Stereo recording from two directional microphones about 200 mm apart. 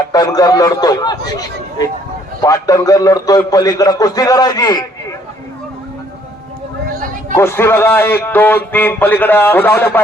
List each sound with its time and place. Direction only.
0.1 s a man's voice: 20° left (ahead or behind)
7.3 s speech: 10° left (ahead or behind)